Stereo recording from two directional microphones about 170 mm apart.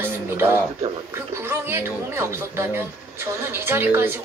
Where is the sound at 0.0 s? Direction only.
15° right (ahead or behind).